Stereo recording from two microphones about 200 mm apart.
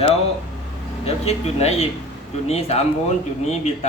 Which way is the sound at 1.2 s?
30° left (ahead or behind).